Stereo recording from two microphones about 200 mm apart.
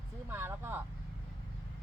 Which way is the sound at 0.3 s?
10° right (ahead or behind).